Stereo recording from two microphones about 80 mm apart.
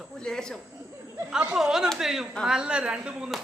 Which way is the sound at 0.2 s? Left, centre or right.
Centre.